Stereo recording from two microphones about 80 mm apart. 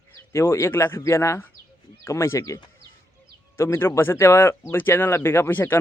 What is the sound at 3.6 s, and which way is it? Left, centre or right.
Speech, left.